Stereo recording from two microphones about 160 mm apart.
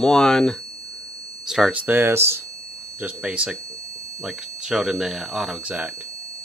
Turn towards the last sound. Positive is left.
turn(degrees=-5)  # may be behind; listen again after turning